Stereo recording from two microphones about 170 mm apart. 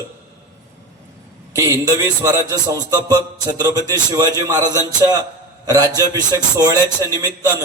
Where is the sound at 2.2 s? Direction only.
20° right (ahead or behind).